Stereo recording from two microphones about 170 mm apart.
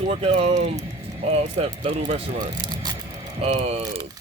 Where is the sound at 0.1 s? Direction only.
35° right (ahead or behind).